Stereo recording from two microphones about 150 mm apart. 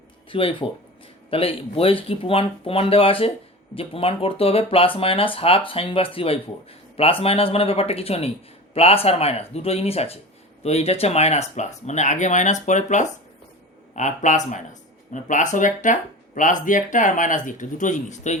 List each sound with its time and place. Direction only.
0.3 s speech: 35° left (ahead or behind); by 18.3 s 50° left (ahead or behind)